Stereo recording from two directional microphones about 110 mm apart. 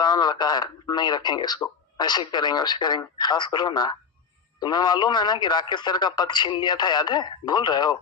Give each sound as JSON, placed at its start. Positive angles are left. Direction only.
{"t": 0.0, "sound": "speech", "side_deg": 40}